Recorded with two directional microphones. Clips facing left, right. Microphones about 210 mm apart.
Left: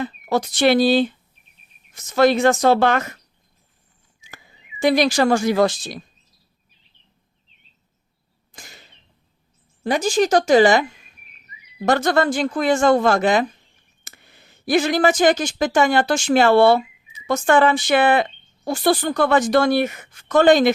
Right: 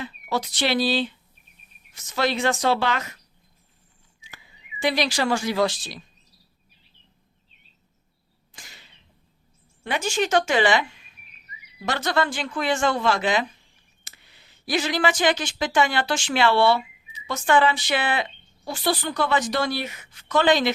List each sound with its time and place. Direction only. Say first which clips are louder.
0.0 s speech: left 6 dB; 50° left (ahead or behind)
4.2 s speech: left 4 dB; 45° left (ahead or behind)
8.5 s arrow: left 5 dB; 45° left (ahead or behind)
9.8 s a woman's voice: left 7 dB; 40° left (ahead or behind)